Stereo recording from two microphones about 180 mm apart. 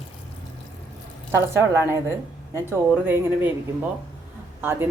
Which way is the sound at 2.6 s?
10° right (ahead or behind).